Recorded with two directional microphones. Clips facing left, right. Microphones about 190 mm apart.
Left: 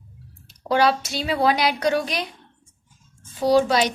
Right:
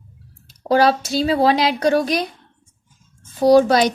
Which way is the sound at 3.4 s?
45° right (ahead or behind).